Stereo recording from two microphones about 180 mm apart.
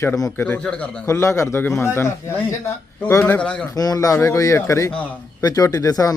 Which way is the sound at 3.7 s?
20° left (ahead or behind).